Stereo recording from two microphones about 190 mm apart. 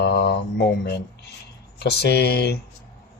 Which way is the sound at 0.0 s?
60° left (ahead or behind).